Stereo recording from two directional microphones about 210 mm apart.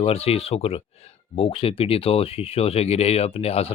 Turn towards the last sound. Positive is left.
turn(degrees=30)  # may be behind; listen again after turning